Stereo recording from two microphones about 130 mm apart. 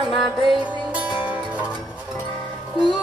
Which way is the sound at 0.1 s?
Centre (ahead or behind).